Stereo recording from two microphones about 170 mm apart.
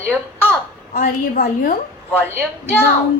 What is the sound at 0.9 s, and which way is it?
Speech, 55° left (ahead or behind).